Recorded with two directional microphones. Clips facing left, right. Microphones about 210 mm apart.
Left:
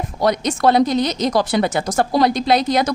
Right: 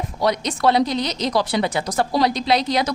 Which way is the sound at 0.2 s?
50° left (ahead or behind).